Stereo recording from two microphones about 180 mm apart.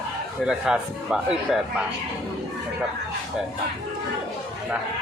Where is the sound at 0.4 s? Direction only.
5° right (ahead or behind).